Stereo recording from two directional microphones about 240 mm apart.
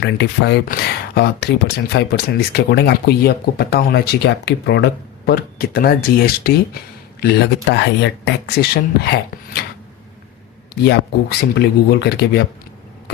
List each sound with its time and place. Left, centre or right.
0.0 s speech: left
10.8 s speech: left